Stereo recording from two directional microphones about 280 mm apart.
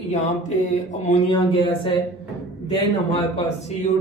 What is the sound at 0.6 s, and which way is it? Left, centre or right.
Speech, left.